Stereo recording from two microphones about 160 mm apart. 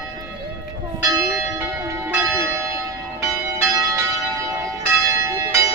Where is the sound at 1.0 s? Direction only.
15° right (ahead or behind).